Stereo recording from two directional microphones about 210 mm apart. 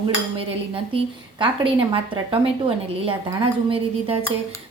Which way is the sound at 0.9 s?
25° right (ahead or behind).